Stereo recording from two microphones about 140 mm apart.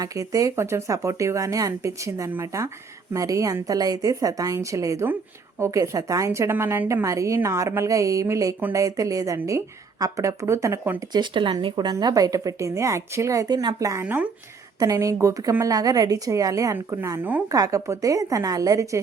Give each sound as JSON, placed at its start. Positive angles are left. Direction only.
{"t": 0.0, "sound": "a woman's voice", "side_deg": -25}
{"t": 11.1, "sound": "a woman's voice", "side_deg": -35}
{"t": 14.0, "sound": "a woman's voice", "side_deg": -10}
{"t": 14.8, "sound": "a woman's voice", "side_deg": -25}